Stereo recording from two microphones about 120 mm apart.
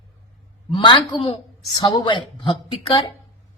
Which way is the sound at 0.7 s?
40° left (ahead or behind).